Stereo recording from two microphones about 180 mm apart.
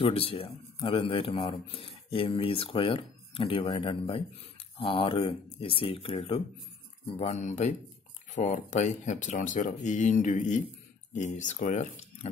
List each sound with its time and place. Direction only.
0.0 s speech: 30° left (ahead or behind)